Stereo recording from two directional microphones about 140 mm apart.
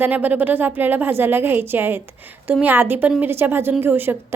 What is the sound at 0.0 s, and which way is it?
Speech, 15° right (ahead or behind).